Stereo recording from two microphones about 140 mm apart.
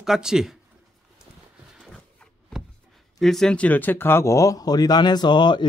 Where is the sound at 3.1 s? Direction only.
Centre (ahead or behind).